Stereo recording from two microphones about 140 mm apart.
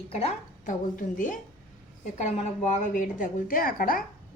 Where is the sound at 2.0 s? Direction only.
55° left (ahead or behind).